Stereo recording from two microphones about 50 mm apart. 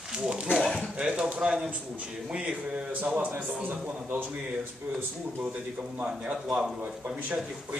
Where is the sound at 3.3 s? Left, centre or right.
Right.